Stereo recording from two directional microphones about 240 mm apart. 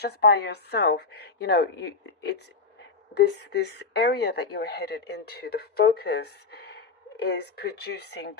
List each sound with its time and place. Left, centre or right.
0.0 s speech: left